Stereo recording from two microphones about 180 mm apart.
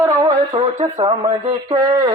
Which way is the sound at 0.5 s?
30° right (ahead or behind).